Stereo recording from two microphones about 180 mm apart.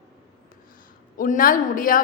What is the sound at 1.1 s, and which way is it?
Speech, 50° left (ahead or behind).